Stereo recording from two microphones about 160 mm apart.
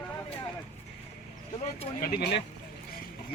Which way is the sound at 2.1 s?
90° left.